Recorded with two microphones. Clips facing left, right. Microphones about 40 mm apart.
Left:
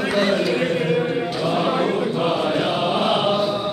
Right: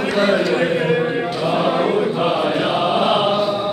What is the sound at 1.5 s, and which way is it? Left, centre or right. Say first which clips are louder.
Chant: right 3 dB; centre.